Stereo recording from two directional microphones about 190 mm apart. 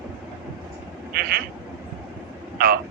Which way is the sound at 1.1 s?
55° right (ahead or behind).